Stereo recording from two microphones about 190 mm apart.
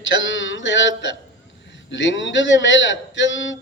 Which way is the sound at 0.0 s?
75° left (ahead or behind).